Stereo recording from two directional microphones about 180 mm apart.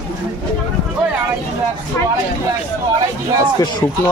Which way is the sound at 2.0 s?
15° left (ahead or behind).